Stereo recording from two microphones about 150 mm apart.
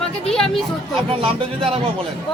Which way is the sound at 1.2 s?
40° right (ahead or behind).